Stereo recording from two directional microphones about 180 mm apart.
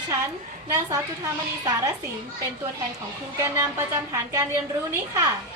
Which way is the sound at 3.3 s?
15° right (ahead or behind).